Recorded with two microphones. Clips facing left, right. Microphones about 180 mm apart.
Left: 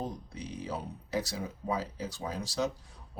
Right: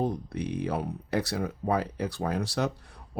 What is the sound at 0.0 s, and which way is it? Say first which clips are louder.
Speech: right 9 dB; 60° right (ahead or behind).